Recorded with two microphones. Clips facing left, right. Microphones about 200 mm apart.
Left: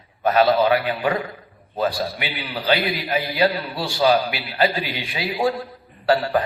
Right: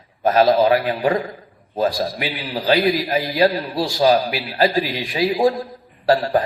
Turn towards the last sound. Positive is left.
turn(degrees=-40)  # may be behind; listen again after turning